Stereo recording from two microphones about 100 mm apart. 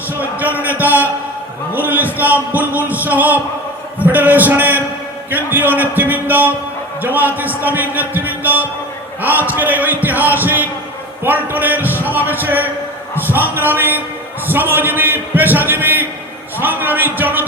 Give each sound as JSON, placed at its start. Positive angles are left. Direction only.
{"t": 0.2, "sound": "a sound", "side_deg": -15}
{"t": 0.8, "sound": "speech", "side_deg": -15}
{"t": 11.2, "sound": "music", "side_deg": -15}
{"t": 12.0, "sound": "a man's voice", "side_deg": -20}